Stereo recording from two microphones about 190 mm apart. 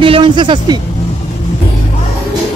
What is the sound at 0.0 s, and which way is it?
Vehicle, 25° right (ahead or behind).